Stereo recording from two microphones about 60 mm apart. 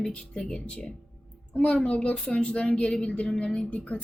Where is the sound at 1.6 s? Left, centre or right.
Left.